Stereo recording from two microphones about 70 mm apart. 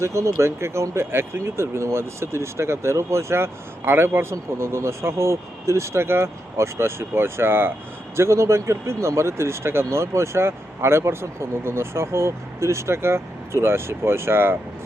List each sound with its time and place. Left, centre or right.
0.0 s speech: right